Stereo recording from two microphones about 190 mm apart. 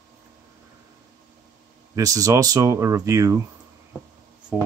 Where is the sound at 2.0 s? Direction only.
15° right (ahead or behind).